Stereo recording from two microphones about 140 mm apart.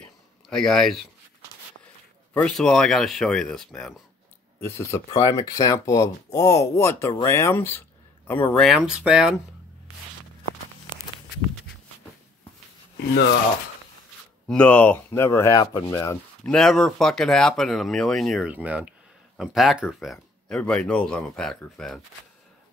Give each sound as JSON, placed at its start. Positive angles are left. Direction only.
{"t": 0.0, "sound": "a sound", "side_deg": 5}
{"t": 2.3, "sound": "speech", "side_deg": 5}
{"t": 4.6, "sound": "speech", "side_deg": 20}
{"t": 8.6, "sound": "speech", "side_deg": 0}
{"t": 14.5, "sound": "speech", "side_deg": 10}
{"t": 16.4, "sound": "speech", "side_deg": 5}